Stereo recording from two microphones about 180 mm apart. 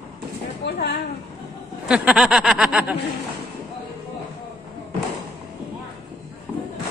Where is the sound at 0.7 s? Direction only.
65° left (ahead or behind).